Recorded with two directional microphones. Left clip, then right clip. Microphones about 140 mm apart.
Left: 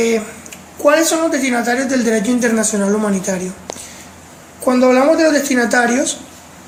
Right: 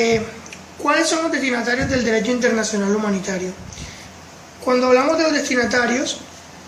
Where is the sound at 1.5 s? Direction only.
70° left (ahead or behind).